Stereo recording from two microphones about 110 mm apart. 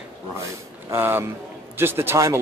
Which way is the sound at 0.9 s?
20° right (ahead or behind).